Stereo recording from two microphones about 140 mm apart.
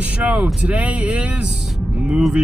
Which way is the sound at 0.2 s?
10° right (ahead or behind).